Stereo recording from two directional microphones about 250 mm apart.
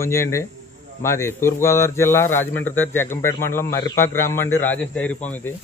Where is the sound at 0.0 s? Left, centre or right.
Centre.